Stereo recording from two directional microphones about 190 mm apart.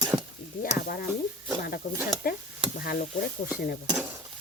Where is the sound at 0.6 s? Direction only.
50° left (ahead or behind).